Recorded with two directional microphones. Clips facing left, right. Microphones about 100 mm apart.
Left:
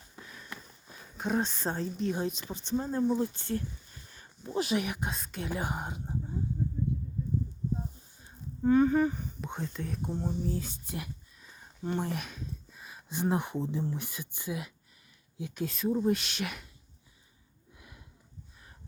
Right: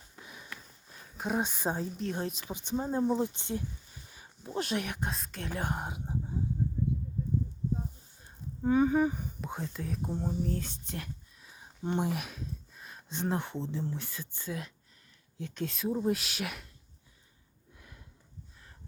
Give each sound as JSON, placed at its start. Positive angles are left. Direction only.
{"t": 0.2, "sound": "sniff", "side_deg": -15}
{"t": 0.9, "sound": "speech", "side_deg": 0}
{"t": 2.5, "sound": "speech", "side_deg": -15}
{"t": 4.1, "sound": "speech", "side_deg": -5}
{"t": 8.2, "sound": "a sound", "side_deg": 0}
{"t": 8.7, "sound": "speech", "side_deg": -10}
{"t": 11.4, "sound": "a sound", "side_deg": -5}
{"t": 11.8, "sound": "speech", "side_deg": -15}
{"t": 12.1, "sound": "speech", "side_deg": -5}
{"t": 17.7, "sound": "sniff", "side_deg": 10}